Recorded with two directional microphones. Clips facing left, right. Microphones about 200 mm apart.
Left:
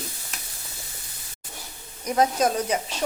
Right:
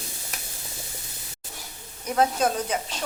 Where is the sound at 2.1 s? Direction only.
10° left (ahead or behind).